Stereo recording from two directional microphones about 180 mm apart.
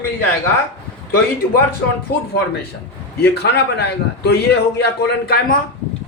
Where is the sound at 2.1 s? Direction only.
60° left (ahead or behind).